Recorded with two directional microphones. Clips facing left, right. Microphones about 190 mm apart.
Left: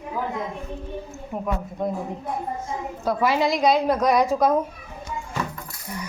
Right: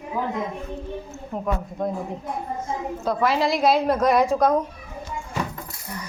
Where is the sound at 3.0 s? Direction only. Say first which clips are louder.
Left 1 dB; 5° left (ahead or behind).